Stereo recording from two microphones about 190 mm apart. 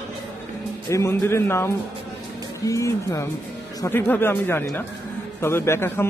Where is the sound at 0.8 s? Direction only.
15° left (ahead or behind).